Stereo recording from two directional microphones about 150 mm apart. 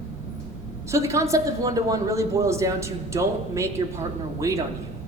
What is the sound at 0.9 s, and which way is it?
A woman's voice, 20° right (ahead or behind).